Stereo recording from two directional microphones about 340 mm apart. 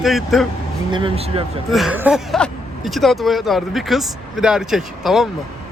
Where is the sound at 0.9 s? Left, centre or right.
Centre.